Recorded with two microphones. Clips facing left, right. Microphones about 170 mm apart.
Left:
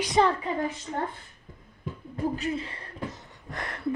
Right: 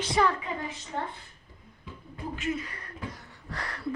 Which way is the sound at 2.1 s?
35° left (ahead or behind).